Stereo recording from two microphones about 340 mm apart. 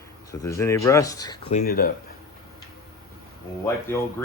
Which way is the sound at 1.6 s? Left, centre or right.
Left.